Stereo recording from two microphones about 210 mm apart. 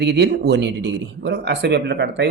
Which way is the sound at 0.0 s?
50° right (ahead or behind).